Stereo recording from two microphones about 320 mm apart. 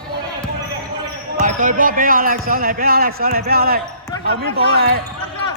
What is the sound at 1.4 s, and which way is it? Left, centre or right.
Speech, right.